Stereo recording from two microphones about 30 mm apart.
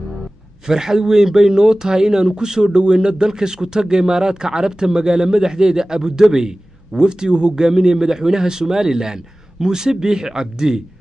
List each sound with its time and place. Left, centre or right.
0.7 s speech: centre